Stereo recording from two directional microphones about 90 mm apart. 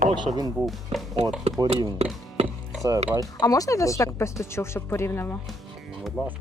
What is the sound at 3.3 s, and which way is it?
Speech, 40° left (ahead or behind).